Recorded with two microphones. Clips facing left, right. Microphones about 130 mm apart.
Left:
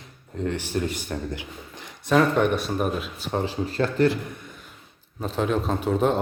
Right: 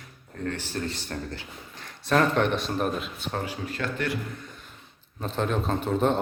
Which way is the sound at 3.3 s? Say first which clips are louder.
Left 7 dB; 30° left (ahead or behind).